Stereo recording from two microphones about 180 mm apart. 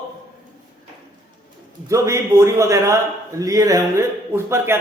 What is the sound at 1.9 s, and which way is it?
Speech, 15° right (ahead or behind).